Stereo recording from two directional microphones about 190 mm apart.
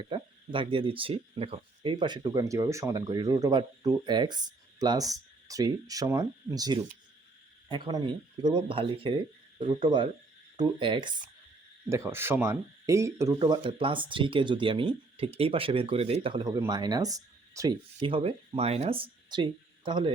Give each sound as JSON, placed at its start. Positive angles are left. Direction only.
{"t": 0.1, "sound": "speech", "side_deg": -25}
{"t": 11.9, "sound": "speech", "side_deg": -15}